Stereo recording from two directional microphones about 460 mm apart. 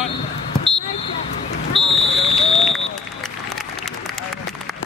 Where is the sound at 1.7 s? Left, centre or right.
Centre.